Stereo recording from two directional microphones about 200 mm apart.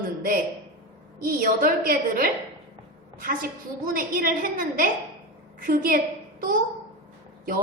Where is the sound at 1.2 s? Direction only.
45° right (ahead or behind).